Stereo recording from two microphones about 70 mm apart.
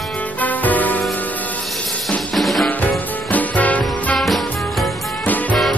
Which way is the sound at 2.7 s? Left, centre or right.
Left.